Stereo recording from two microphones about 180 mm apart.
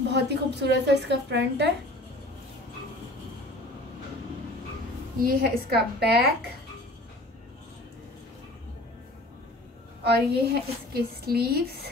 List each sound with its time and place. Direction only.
0.1 s a woman's voice: 70° right (ahead or behind)
5.2 s a woman's voice: 55° right (ahead or behind)
10.1 s a woman's voice: 60° right (ahead or behind)